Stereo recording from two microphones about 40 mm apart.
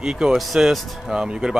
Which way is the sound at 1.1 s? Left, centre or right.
Right.